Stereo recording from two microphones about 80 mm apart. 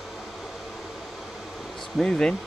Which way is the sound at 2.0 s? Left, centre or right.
Centre.